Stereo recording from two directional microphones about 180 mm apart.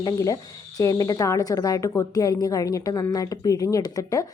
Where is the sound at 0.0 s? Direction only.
20° left (ahead or behind).